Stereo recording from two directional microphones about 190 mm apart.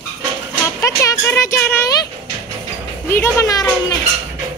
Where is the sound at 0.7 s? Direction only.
15° left (ahead or behind).